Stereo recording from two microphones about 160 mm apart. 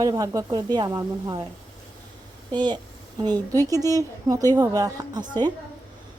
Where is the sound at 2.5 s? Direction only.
30° right (ahead or behind).